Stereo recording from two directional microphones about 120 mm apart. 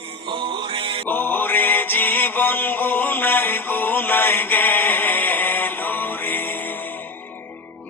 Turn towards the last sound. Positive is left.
turn(degrees=15)  # may be behind; listen again after turning